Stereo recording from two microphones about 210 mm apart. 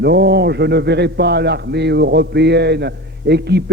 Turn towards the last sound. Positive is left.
turn(degrees=-50)  # may be behind; listen again after turning